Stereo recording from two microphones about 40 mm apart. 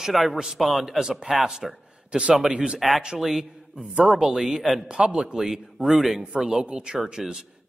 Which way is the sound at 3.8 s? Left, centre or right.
Right.